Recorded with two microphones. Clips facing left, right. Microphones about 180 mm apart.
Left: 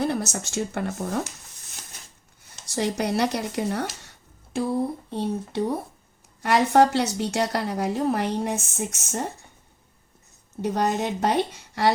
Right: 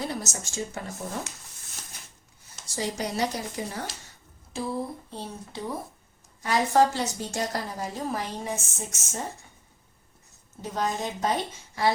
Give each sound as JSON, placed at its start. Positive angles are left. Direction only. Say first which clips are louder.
{"t": 0.0, "sound": "speech", "louder": "left 7 dB", "side_deg": 60}
{"t": 2.6, "sound": "a woman's voice", "louder": "left 6 dB", "side_deg": 65}
{"t": 10.6, "sound": "a woman's voice", "louder": "left 5 dB", "side_deg": 65}